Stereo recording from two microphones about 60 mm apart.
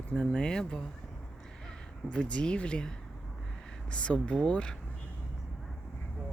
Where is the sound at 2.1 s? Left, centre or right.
Centre.